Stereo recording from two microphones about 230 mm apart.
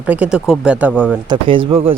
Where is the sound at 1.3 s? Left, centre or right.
Right.